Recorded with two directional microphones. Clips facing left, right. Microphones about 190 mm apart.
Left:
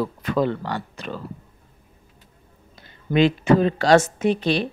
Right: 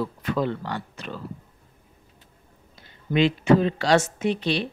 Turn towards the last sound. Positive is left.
turn(degrees=45)  # may be behind; listen again after turning